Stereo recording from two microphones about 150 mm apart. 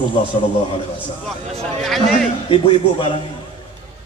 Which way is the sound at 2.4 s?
35° left (ahead or behind).